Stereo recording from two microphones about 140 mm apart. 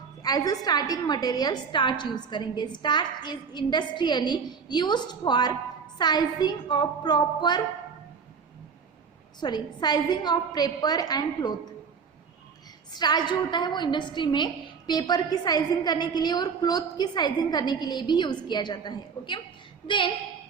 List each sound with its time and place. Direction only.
0.2 s a woman's voice: 25° left (ahead or behind)
9.4 s a woman's voice: 30° left (ahead or behind)
12.9 s a woman's voice: 30° left (ahead or behind)